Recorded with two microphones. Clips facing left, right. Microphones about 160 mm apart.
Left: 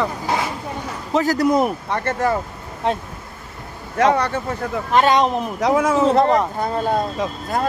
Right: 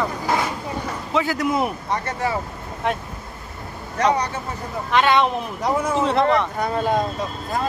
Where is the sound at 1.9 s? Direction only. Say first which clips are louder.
Left 4 dB; 50° left (ahead or behind).